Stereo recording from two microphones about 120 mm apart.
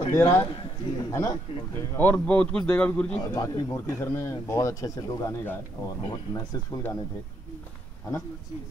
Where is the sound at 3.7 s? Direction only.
25° left (ahead or behind).